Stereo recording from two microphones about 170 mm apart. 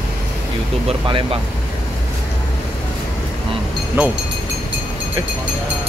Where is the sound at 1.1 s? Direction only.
30° right (ahead or behind).